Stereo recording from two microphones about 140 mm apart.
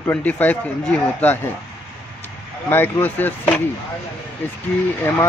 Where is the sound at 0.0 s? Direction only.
10° left (ahead or behind).